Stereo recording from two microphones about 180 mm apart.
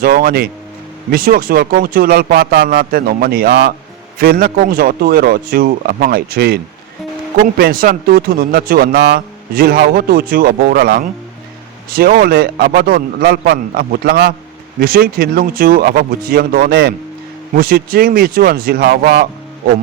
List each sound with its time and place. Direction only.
0.0 s speech: 50° right (ahead or behind)